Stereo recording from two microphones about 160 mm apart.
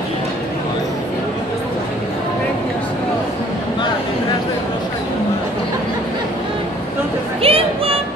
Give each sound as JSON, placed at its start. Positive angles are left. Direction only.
{"t": 7.4, "sound": "music", "side_deg": -35}